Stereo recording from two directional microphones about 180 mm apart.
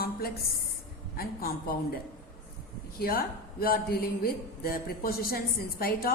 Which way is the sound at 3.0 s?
55° left (ahead or behind).